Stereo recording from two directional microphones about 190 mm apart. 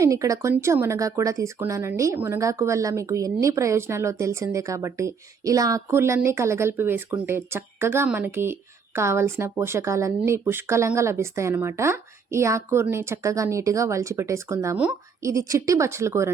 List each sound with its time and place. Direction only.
0.0 s a woman's voice: 15° right (ahead or behind)